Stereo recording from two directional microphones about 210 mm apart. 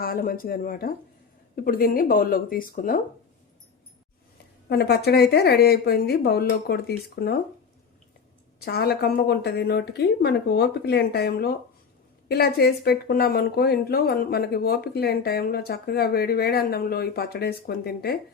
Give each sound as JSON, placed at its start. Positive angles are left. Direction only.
{"t": 0.0, "sound": "speech", "side_deg": 45}
{"t": 4.7, "sound": "speech", "side_deg": 50}
{"t": 8.5, "sound": "speech", "side_deg": 50}